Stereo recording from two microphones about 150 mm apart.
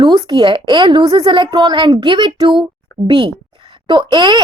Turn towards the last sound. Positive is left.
turn(degrees=-30)  # may be behind; listen again after turning